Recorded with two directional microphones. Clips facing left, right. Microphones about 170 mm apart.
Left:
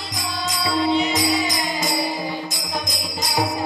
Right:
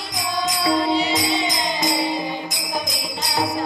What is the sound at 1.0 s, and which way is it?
Music, 25° right (ahead or behind).